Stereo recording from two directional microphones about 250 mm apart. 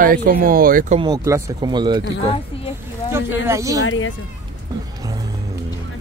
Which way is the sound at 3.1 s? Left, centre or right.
Centre.